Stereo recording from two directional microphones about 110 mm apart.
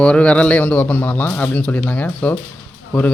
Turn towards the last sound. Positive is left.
turn(degrees=10)  # may be behind; listen again after turning